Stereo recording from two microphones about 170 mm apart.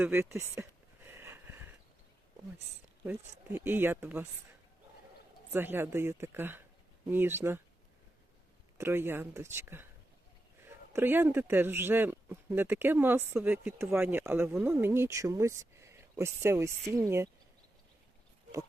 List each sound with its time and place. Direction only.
0.0 s a sound: 15° right (ahead or behind)
3.0 s speech: 10° right (ahead or behind)
5.5 s speech: 10° right (ahead or behind)
8.8 s speech: 15° right (ahead or behind)
10.9 s speech: 10° right (ahead or behind)